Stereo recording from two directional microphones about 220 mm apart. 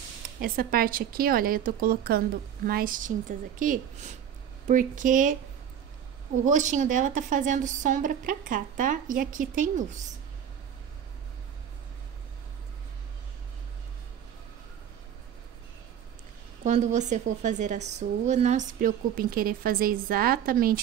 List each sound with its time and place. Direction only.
0.4 s a woman's voice: 40° right (ahead or behind)
6.4 s a woman's voice: 35° right (ahead or behind)
16.6 s a woman's voice: 35° right (ahead or behind)